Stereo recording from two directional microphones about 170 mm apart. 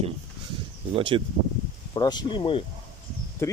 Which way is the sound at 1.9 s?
25° left (ahead or behind).